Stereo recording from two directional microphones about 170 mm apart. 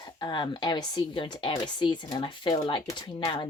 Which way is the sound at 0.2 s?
25° left (ahead or behind).